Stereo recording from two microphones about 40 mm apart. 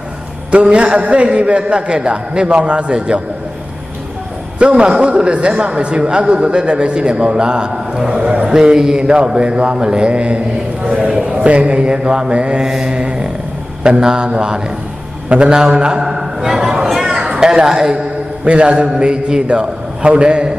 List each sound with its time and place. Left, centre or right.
0.5 s a man's voice: right
4.6 s a man's voice: right
12.6 s mantra: centre
12.9 s a sound: right
13.8 s a man's voice: right
15.7 s a sound: right
17.4 s a man's voice: centre